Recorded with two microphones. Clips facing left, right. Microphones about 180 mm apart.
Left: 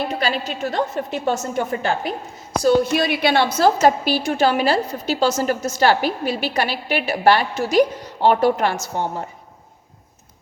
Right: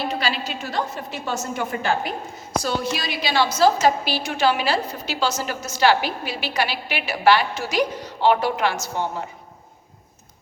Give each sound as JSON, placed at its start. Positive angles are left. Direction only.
{"t": 0.2, "sound": "a woman's voice", "side_deg": 50}